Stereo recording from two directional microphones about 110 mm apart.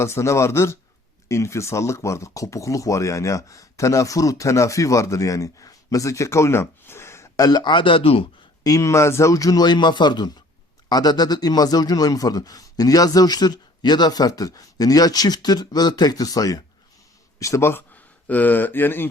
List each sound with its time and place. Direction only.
0.0 s speech: 25° left (ahead or behind); by 8.3 s 55° left (ahead or behind)
8.6 s a man's voice: 30° left (ahead or behind)